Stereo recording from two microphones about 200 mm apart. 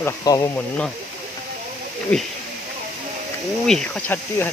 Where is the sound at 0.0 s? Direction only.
20° left (ahead or behind).